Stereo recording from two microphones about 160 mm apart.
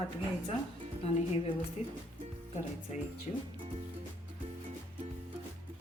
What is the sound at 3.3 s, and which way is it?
Speech, 40° left (ahead or behind).